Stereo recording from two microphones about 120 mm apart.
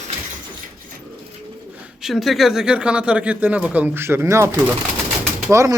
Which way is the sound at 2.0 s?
Centre (ahead or behind).